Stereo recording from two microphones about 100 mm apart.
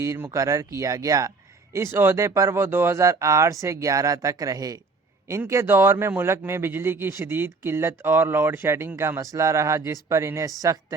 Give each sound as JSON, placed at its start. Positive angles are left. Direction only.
{"t": 0.0, "sound": "speech", "side_deg": -30}
{"t": 5.5, "sound": "a man's voice", "side_deg": -25}